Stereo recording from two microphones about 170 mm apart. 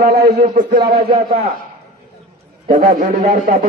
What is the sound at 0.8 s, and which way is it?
Speech, 40° right (ahead or behind).